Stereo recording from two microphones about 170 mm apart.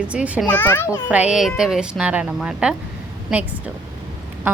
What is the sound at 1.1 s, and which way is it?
Speech, 5° right (ahead or behind).